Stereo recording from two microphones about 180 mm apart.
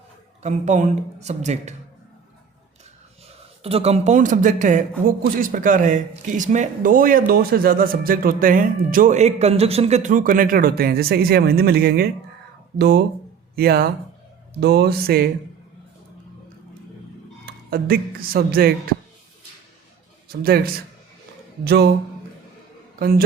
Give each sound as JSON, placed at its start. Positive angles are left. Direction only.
{"t": 0.4, "sound": "speech", "side_deg": -40}
{"t": 3.6, "sound": "speech", "side_deg": -35}
{"t": 13.6, "sound": "mantra", "side_deg": -60}
{"t": 17.4, "sound": "speech", "side_deg": -55}
{"t": 20.2, "sound": "mantra", "side_deg": -55}
{"t": 23.0, "sound": "a man's voice", "side_deg": -55}